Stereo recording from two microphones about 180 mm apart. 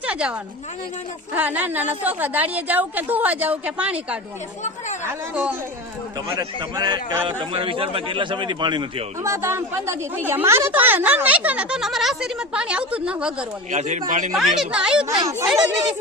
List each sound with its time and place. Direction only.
0.0 s a woman's voice: 5° right (ahead or behind)
6.2 s speech: 25° right (ahead or behind)
9.3 s speech: 15° right (ahead or behind)
13.7 s speech: 40° right (ahead or behind)
14.3 s speech: 5° right (ahead or behind)